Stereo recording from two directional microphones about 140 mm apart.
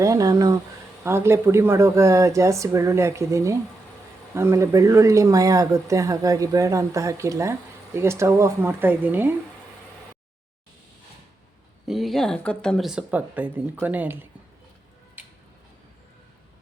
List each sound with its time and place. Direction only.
0.0 s speech: 25° right (ahead or behind)
11.9 s speech: centre (ahead or behind)